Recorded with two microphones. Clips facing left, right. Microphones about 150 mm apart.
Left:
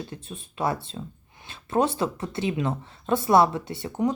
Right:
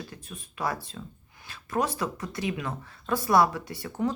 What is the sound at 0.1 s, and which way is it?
Speech, 25° left (ahead or behind).